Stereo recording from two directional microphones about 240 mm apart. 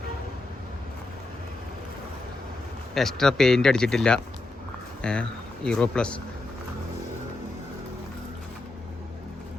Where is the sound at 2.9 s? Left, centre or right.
Centre.